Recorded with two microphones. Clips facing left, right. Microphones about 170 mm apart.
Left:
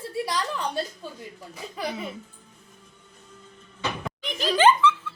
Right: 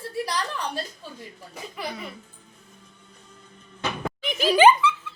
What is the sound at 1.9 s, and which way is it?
Music, 20° left (ahead or behind).